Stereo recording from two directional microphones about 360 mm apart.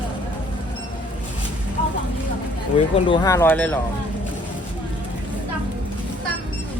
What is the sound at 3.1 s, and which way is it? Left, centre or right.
Speech, centre.